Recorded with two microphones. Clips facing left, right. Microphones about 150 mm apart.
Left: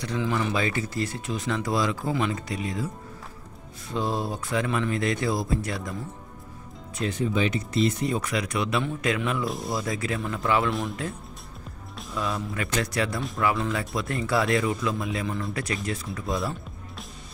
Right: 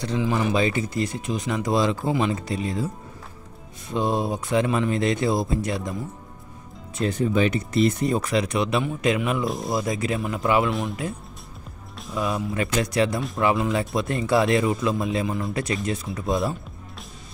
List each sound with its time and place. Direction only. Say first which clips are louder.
0.2 s speech: right 4 dB; 15° right (ahead or behind)
3.9 s speech: right 4 dB; 20° right (ahead or behind)
7.0 s speech: right 4 dB; 40° right (ahead or behind)
8.2 s speech: right 5 dB; 30° right (ahead or behind); by 10.7 s 15° right (ahead or behind)
10.7 s speech: right 2 dB; centre (ahead or behind)
12.2 s speech: right 4 dB; 15° right (ahead or behind)